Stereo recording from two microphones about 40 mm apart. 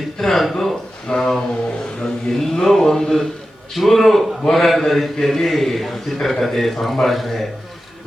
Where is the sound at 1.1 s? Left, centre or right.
Centre.